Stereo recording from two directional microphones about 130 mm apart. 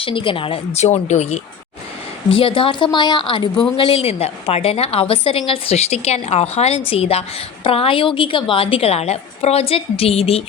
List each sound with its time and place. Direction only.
0.0 s a woman's voice: 40° left (ahead or behind); by 1.4 s 60° left (ahead or behind)
2.4 s a woman's voice: 45° left (ahead or behind)